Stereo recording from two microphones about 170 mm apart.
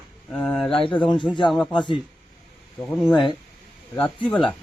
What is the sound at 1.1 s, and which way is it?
Speech, 30° left (ahead or behind).